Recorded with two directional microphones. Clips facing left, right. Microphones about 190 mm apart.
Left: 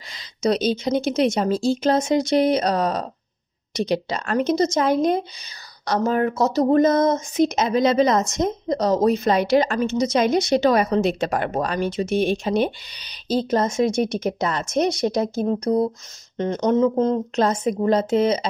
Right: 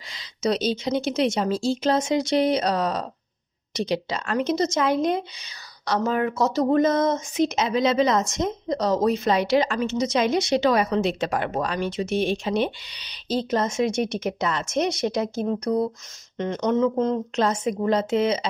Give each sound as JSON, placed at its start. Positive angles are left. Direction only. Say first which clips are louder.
{"t": 0.1, "sound": "a woman's voice", "louder": "left 3 dB", "side_deg": 45}